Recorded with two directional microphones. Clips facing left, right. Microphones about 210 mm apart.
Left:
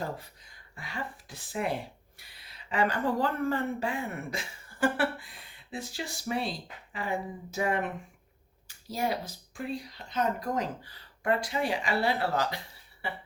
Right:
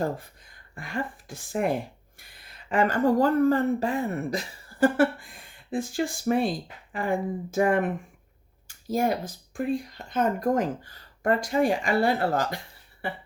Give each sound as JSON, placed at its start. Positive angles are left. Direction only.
{"t": 0.0, "sound": "speech", "side_deg": -50}